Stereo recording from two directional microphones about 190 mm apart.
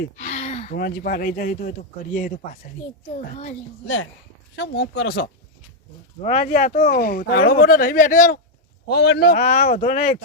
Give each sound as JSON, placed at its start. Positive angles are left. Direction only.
{"t": 0.2, "sound": "a sound", "side_deg": 35}
{"t": 0.8, "sound": "speech", "side_deg": 50}
{"t": 3.8, "sound": "speech", "side_deg": 90}
{"t": 4.5, "sound": "speech", "side_deg": 65}
{"t": 6.2, "sound": "speech", "side_deg": 40}
{"t": 8.9, "sound": "speech", "side_deg": 60}
{"t": 9.4, "sound": "speech", "side_deg": 35}